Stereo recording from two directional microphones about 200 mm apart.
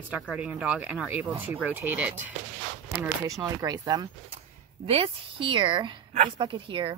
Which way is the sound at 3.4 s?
20° right (ahead or behind).